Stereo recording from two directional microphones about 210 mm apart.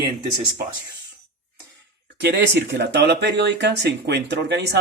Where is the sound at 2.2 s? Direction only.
55° right (ahead or behind).